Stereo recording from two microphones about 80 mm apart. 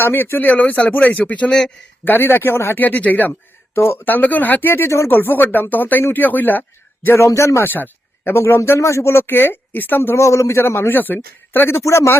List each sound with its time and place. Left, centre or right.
0.0 s a man's voice: left; by 1.7 s centre
2.0 s speech: left
3.8 s speech: left
11.8 s speech: left